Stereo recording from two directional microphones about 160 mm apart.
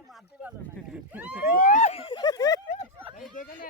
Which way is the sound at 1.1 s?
10° right (ahead or behind).